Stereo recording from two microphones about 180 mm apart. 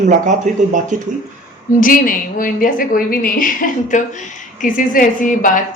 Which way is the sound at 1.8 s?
50° left (ahead or behind).